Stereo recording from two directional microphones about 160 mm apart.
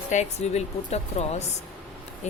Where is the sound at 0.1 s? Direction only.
45° left (ahead or behind).